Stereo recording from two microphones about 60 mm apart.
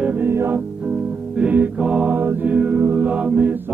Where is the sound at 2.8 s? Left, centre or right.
Right.